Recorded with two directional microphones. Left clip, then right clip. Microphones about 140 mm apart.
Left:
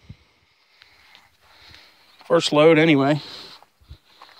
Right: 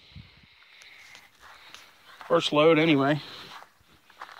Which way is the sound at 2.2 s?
90° left.